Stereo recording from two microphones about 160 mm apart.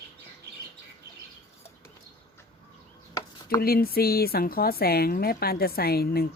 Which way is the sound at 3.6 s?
70° left (ahead or behind).